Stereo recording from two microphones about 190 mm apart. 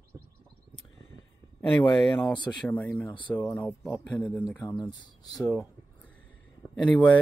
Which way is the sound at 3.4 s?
10° left (ahead or behind).